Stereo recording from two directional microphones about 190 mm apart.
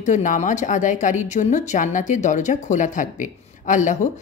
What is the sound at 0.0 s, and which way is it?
Speech, 40° left (ahead or behind).